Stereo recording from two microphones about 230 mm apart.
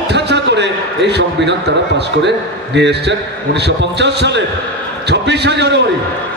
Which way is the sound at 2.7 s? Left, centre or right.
Right.